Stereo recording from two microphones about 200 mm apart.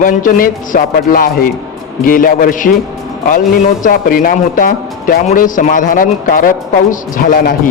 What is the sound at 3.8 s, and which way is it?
A man's voice, 45° left (ahead or behind).